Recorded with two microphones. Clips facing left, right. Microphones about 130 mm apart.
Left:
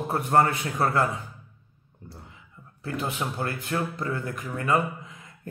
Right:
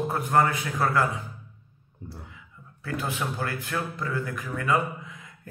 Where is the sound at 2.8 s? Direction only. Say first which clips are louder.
Even; 25° left (ahead or behind).